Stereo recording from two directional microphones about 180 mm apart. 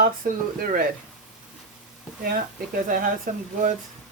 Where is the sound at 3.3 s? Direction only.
45° right (ahead or behind).